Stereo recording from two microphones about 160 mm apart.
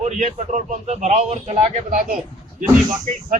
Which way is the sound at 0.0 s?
45° right (ahead or behind).